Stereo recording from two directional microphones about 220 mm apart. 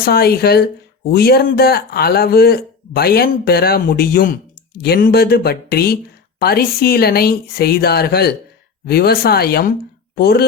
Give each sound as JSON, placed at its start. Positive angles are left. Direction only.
{"t": 0.0, "sound": "speech", "side_deg": 45}